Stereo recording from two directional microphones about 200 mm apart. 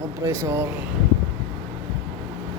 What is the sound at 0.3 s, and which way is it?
Speech, 10° right (ahead or behind).